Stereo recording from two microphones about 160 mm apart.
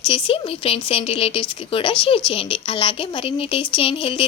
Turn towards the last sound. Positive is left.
turn(degrees=35)  # may be behind; listen again after turning